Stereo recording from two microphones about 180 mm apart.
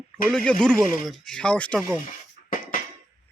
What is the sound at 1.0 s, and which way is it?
Speech, centre (ahead or behind).